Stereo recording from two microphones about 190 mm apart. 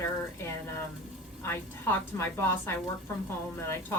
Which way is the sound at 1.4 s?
10° left (ahead or behind).